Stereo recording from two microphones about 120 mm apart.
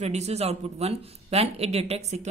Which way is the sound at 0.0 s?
65° right (ahead or behind).